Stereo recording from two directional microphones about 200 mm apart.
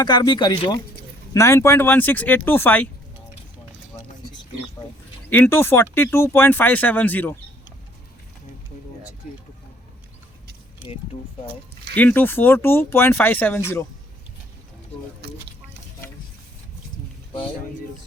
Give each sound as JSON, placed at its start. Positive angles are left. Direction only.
{"t": 0.0, "sound": "speech", "side_deg": 20}
{"t": 5.3, "sound": "speech", "side_deg": 10}
{"t": 11.9, "sound": "speech", "side_deg": 10}